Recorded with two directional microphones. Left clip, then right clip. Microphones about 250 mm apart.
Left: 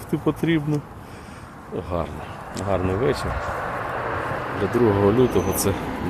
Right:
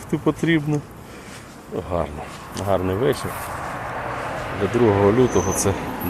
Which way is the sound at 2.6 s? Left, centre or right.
Centre.